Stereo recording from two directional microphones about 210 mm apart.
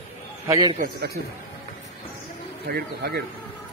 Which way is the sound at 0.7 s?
45° right (ahead or behind).